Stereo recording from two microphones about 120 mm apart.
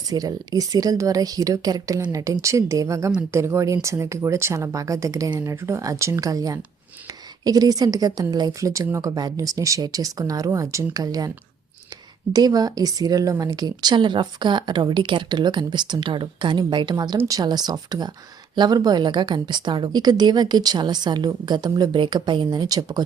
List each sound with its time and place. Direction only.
0.1 s a woman's voice: 30° right (ahead or behind)
12.3 s a woman's voice: 35° right (ahead or behind)